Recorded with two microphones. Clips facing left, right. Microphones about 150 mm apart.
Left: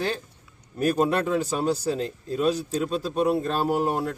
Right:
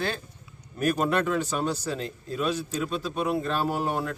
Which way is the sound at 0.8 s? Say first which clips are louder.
Left 2 dB; 35° left (ahead or behind).